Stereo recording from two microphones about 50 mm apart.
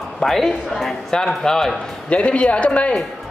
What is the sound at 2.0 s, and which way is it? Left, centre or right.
Speech, left.